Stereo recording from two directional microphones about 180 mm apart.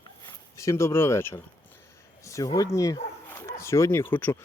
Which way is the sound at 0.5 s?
15° left (ahead or behind).